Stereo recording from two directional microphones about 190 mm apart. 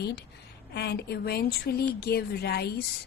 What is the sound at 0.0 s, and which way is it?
A woman's voice, 60° left (ahead or behind).